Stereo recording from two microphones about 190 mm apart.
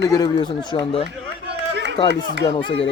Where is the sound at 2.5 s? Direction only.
30° left (ahead or behind).